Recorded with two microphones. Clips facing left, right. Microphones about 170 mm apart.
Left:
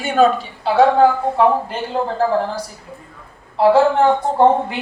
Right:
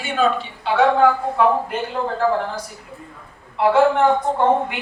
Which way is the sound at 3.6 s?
30° left (ahead or behind).